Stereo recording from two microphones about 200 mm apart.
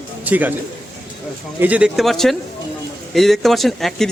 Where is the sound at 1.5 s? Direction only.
5° right (ahead or behind).